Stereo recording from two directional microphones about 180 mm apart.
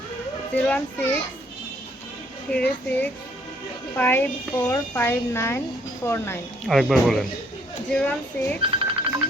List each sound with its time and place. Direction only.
0.5 s speech: 5° left (ahead or behind)
2.5 s speech: 5° left (ahead or behind)
6.7 s speech: centre (ahead or behind)
8.6 s music: 30° right (ahead or behind)